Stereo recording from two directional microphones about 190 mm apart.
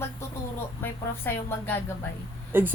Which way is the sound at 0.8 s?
10° left (ahead or behind).